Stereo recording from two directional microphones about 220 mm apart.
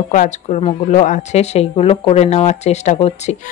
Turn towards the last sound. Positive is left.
turn(degrees=30)  # may be behind; listen again after turning